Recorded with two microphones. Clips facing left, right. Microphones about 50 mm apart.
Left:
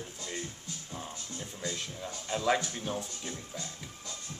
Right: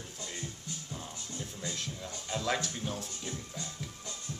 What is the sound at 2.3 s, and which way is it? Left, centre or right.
Speech, centre.